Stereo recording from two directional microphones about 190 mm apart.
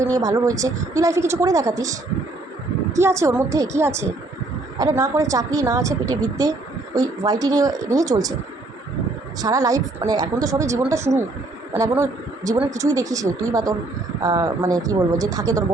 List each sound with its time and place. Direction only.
0.0 s a woman's voice: 20° right (ahead or behind)
9.4 s a woman's voice: 20° right (ahead or behind)